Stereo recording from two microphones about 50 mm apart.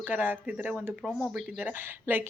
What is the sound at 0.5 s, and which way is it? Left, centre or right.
Speech, right.